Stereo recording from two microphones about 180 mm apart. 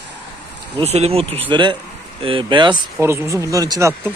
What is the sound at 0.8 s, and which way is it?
Speech, 35° right (ahead or behind).